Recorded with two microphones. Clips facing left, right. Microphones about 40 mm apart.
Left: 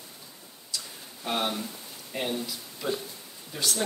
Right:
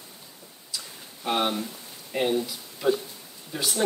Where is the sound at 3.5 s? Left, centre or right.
Centre.